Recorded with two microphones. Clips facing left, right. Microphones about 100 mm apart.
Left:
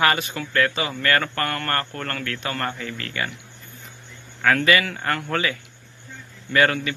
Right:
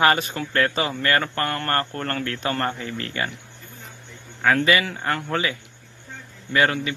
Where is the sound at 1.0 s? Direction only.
20° right (ahead or behind).